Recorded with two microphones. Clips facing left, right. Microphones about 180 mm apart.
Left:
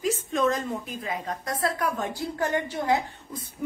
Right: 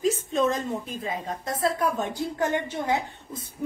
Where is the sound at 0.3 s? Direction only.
25° right (ahead or behind).